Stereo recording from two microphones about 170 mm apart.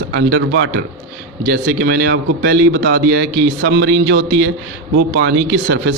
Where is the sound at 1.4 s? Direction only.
65° right (ahead or behind).